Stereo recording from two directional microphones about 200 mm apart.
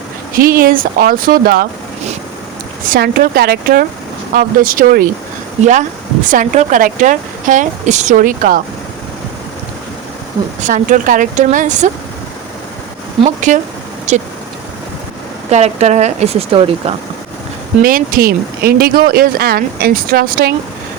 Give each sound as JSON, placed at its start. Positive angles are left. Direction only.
{"t": 0.3, "sound": "speech", "side_deg": -45}
{"t": 2.9, "sound": "speech", "side_deg": -50}
{"t": 6.2, "sound": "a woman's voice", "side_deg": -40}
{"t": 10.6, "sound": "a woman's voice", "side_deg": -40}
{"t": 13.2, "sound": "a woman's voice", "side_deg": -40}
{"t": 15.4, "sound": "a woman's voice", "side_deg": -35}
{"t": 17.8, "sound": "speech", "side_deg": -45}